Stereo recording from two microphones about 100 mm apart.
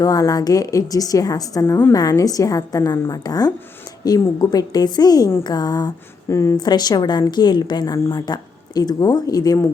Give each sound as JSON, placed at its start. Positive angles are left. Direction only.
{"t": 0.0, "sound": "a woman's voice", "side_deg": 35}
{"t": 6.6, "sound": "a woman's voice", "side_deg": 45}